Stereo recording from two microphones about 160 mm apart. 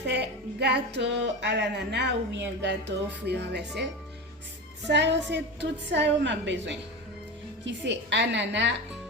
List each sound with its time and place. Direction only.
0.0 s speech: 90° right
4.9 s speech: 90° right